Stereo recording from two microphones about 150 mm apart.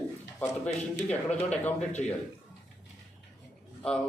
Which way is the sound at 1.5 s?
50° left (ahead or behind).